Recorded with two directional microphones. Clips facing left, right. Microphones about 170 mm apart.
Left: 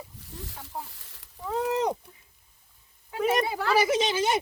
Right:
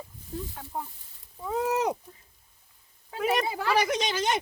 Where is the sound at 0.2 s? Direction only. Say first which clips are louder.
Right 5 dB; 85° left.